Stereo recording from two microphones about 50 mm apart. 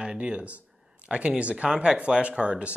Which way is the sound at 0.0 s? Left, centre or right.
Right.